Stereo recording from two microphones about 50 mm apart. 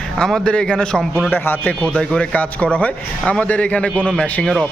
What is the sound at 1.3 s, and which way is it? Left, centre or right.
Speech, left.